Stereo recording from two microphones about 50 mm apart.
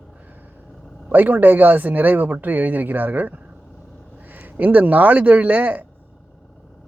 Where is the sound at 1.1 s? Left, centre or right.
Right.